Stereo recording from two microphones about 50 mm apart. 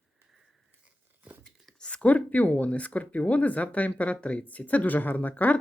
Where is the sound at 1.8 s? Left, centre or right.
Centre.